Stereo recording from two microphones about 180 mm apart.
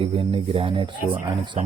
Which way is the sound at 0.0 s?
30° right (ahead or behind).